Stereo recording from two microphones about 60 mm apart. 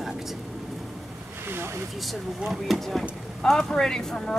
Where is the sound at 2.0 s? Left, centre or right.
Centre.